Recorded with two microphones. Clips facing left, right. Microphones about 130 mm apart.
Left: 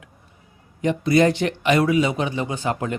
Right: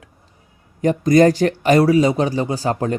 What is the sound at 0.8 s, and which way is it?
Speech, 45° right (ahead or behind).